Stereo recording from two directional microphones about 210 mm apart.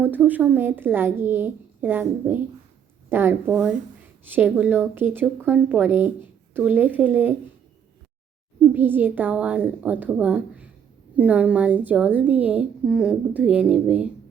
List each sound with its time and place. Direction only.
0.0 s a woman's voice: 10° right (ahead or behind)
8.6 s a woman's voice: 10° right (ahead or behind)